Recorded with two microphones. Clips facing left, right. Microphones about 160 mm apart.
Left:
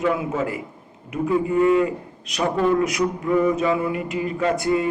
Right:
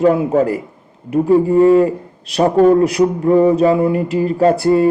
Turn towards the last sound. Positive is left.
turn(degrees=-35)  # may be behind; listen again after turning